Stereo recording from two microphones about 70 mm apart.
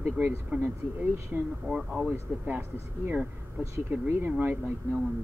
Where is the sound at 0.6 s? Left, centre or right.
Right.